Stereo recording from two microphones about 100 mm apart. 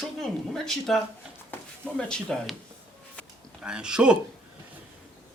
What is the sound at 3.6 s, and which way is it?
Speech, 10° right (ahead or behind).